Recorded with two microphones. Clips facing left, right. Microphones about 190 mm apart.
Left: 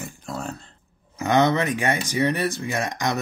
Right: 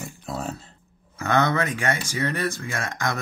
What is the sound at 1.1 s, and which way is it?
Speech, 20° left (ahead or behind).